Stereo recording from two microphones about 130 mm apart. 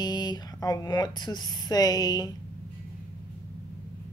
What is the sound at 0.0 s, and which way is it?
Speech, 30° left (ahead or behind).